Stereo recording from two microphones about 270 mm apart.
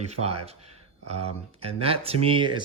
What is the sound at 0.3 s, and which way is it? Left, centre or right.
Speech, right.